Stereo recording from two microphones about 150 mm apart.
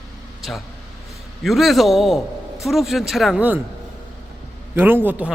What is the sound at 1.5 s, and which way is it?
A man's voice, centre (ahead or behind).